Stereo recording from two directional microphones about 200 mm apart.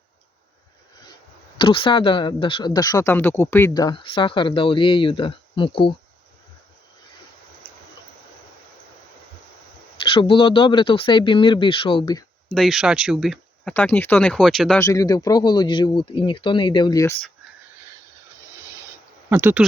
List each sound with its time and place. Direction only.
1.5 s speech: 25° left (ahead or behind)
10.2 s speech: 25° left (ahead or behind)
12.5 s speech: centre (ahead or behind)
14.8 s speech: 15° left (ahead or behind)
19.3 s speech: 10° right (ahead or behind)